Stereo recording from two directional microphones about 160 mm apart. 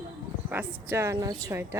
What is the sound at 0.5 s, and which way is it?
A woman's voice, 10° right (ahead or behind).